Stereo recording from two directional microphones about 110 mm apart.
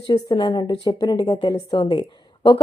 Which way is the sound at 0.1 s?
40° left (ahead or behind).